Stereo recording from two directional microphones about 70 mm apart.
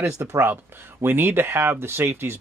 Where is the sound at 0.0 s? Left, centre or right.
Right.